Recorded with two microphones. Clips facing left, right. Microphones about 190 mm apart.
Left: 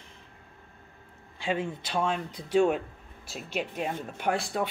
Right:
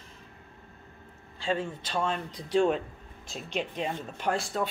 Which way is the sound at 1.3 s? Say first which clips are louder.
Even; 15° left (ahead or behind).